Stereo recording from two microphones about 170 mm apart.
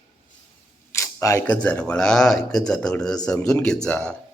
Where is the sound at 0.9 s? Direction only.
20° left (ahead or behind).